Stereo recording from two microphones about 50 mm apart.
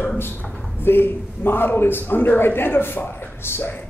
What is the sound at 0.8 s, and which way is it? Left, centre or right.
A man's voice, left.